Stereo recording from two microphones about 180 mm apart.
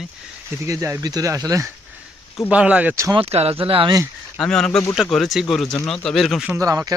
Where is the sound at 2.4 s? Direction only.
5° right (ahead or behind).